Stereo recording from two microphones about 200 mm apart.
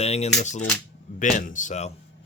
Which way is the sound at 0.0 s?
30° left (ahead or behind).